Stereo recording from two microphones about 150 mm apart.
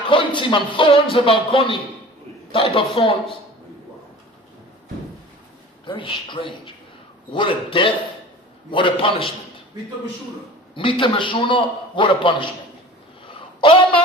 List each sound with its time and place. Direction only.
0.1 s a man's voice: 35° left (ahead or behind)
5.8 s a man's voice: 35° left (ahead or behind)
10.8 s a man's voice: 35° left (ahead or behind)
13.6 s speech: 35° left (ahead or behind)